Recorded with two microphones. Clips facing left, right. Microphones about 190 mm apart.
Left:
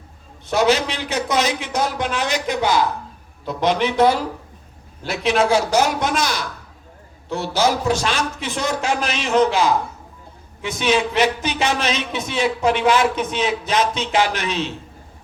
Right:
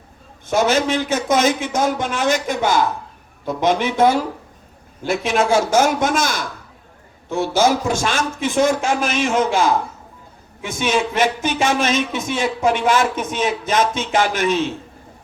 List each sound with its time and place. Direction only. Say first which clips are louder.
0.4 s a man's voice: right 1 dB; 50° right (ahead or behind)